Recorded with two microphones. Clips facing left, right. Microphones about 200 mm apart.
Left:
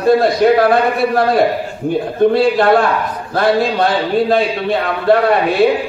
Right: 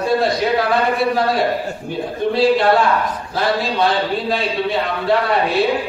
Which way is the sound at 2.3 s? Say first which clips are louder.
Right 2 dB; 55° left (ahead or behind).